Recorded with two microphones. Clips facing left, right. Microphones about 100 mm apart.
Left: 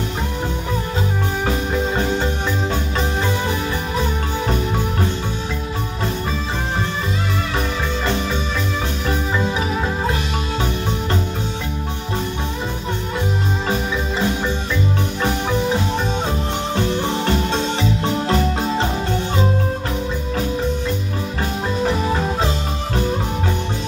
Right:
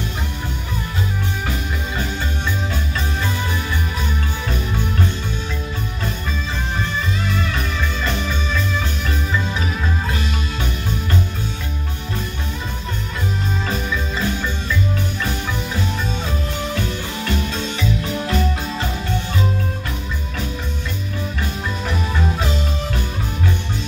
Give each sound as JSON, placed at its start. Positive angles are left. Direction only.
{"t": 1.5, "sound": "music", "side_deg": 35}
{"t": 7.5, "sound": "music", "side_deg": 30}
{"t": 16.3, "sound": "music", "side_deg": 30}
{"t": 21.8, "sound": "music", "side_deg": 35}